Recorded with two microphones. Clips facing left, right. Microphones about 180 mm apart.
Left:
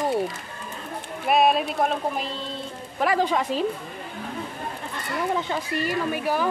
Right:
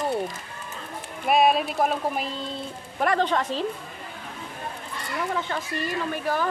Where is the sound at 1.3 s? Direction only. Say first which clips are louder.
Even; centre (ahead or behind).